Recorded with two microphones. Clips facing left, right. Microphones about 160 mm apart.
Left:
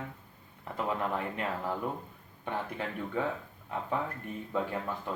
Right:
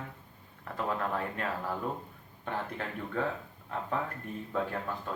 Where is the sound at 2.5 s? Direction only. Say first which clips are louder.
Left 1 dB; 15° left (ahead or behind).